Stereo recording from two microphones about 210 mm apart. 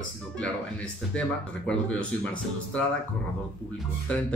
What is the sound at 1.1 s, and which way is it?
Speech, 5° left (ahead or behind).